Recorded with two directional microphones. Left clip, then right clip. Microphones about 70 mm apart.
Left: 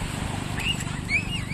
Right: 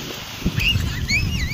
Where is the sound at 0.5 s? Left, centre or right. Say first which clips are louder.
Right 8 dB; right.